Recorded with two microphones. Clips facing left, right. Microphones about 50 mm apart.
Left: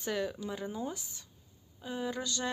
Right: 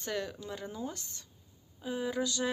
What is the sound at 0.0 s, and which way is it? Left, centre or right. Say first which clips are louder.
A woman's voice: left 2 dB; centre.